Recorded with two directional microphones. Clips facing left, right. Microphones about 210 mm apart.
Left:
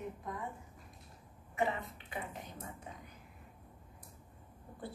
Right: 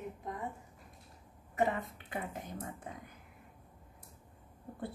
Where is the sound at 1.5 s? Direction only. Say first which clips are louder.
Right 3 dB; 45° right (ahead or behind).